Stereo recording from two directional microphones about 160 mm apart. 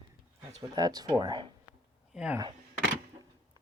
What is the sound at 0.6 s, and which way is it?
Speech, 25° right (ahead or behind).